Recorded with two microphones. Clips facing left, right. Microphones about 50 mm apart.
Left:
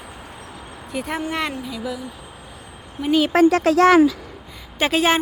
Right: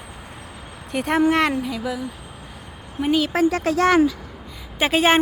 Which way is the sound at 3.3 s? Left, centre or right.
Left.